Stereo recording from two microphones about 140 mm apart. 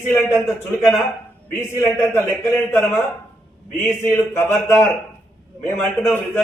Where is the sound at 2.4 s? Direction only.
15° left (ahead or behind).